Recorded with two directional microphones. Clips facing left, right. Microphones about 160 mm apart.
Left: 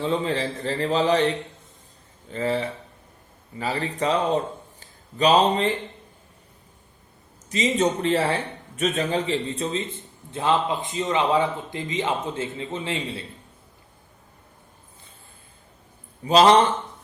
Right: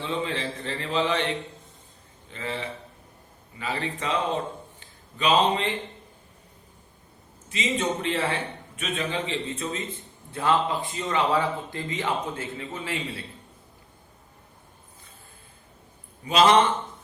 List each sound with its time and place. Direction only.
0.0 s a man's voice: 40° left (ahead or behind)
2.3 s a man's voice: 40° left (ahead or behind)
3.6 s a man's voice: 35° left (ahead or behind)
7.5 s a man's voice: 40° left (ahead or behind)
10.3 s speech: 20° left (ahead or behind)
16.2 s a man's voice: 35° left (ahead or behind)